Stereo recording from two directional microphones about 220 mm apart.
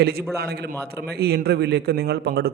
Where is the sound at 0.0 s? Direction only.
45° right (ahead or behind).